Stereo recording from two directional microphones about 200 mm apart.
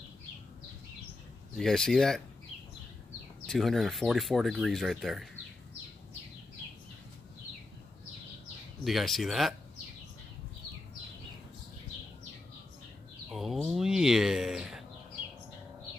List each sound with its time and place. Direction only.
1.6 s speech: centre (ahead or behind)
3.4 s speech: centre (ahead or behind)
8.8 s speech: centre (ahead or behind)
13.3 s speech: centre (ahead or behind)